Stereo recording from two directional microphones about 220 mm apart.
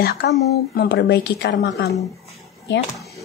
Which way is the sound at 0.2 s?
50° left (ahead or behind).